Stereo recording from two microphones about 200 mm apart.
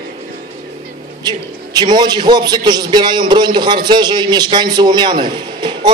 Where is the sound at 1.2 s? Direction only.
20° right (ahead or behind).